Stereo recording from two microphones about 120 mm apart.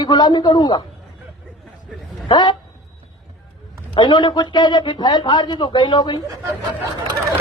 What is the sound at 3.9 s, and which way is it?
Speech, 40° left (ahead or behind).